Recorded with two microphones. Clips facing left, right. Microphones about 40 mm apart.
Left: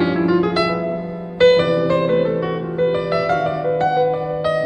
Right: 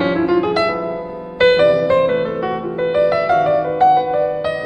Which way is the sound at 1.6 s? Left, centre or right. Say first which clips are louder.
Right 4 dB; centre.